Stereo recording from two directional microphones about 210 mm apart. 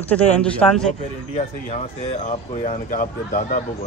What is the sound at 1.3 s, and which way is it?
Speech, 30° left (ahead or behind).